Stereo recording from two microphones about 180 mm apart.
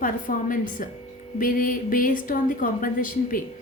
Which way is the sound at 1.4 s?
50° left (ahead or behind).